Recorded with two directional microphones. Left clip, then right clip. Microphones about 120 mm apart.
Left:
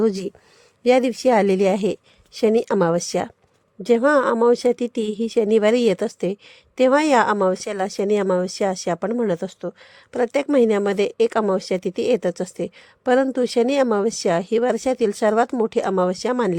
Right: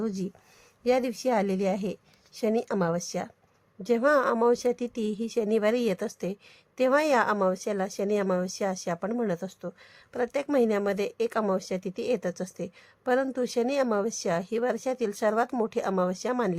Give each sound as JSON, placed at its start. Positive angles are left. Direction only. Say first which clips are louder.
{"t": 0.0, "sound": "a woman's voice", "louder": "left 12 dB", "side_deg": 90}
{"t": 3.8, "sound": "a woman's voice", "louder": "left 7 dB", "side_deg": 60}